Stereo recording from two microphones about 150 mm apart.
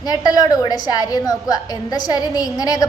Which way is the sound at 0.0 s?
25° left (ahead or behind).